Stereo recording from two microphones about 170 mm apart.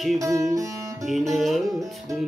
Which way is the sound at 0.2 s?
20° right (ahead or behind).